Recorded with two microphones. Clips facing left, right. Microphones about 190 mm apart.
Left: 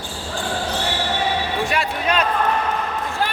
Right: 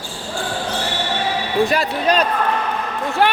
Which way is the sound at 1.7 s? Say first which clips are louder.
Right 4 dB; 35° right (ahead or behind).